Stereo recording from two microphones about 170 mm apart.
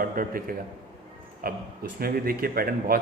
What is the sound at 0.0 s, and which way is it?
A man's voice, 60° right (ahead or behind).